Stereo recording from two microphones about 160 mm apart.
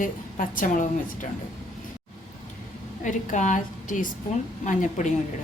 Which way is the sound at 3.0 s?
50° left (ahead or behind).